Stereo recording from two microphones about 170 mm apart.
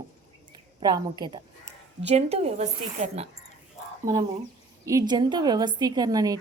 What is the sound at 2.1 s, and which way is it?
Speech, 35° right (ahead or behind).